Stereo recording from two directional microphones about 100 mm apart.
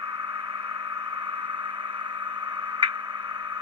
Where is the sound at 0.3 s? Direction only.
50° right (ahead or behind).